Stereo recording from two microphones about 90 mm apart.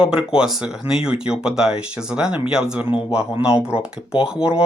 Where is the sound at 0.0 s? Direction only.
10° right (ahead or behind).